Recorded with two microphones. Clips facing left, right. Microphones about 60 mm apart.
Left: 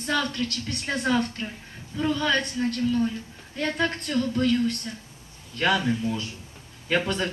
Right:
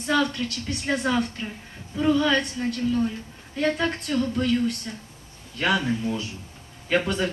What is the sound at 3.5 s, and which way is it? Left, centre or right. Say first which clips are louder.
Speech: right 2 dB; centre.